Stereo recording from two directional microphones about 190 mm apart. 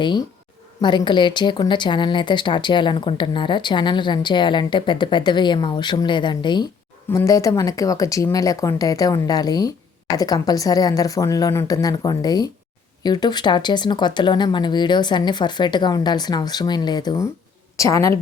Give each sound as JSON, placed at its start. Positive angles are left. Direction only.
{"t": 0.8, "sound": "a woman's voice", "side_deg": 25}